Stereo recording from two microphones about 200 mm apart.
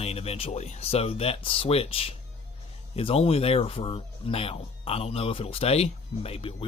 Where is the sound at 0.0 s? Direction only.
30° left (ahead or behind).